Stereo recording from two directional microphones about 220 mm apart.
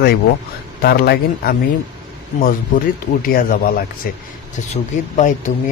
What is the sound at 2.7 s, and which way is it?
Speech, 40° left (ahead or behind).